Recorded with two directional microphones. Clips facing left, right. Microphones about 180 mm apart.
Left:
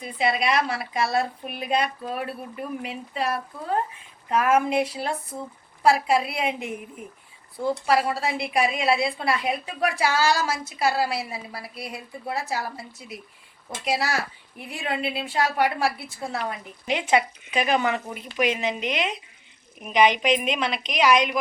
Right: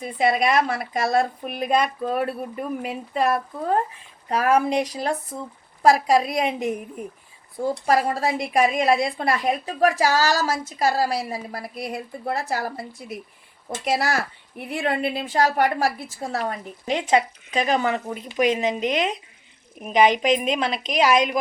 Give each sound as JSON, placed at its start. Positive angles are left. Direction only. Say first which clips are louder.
{"t": 0.0, "sound": "speech", "louder": "right 4 dB", "side_deg": -45}
{"t": 4.3, "sound": "a woman's voice", "louder": "right 1 dB", "side_deg": -35}